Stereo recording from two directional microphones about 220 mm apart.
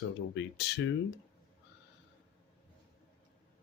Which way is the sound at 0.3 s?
50° left (ahead or behind).